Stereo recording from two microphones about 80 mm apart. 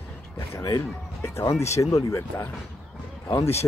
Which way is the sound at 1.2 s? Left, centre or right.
Left.